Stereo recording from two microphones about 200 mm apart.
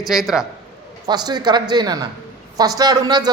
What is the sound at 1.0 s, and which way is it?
Speech, 20° right (ahead or behind).